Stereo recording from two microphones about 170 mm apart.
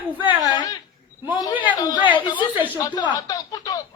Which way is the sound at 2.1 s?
30° left (ahead or behind).